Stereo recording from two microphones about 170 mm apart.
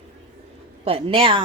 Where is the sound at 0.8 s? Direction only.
35° right (ahead or behind).